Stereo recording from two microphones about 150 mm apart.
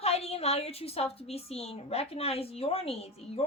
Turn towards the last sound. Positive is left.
turn(degrees=40)  # may be behind; listen again after turning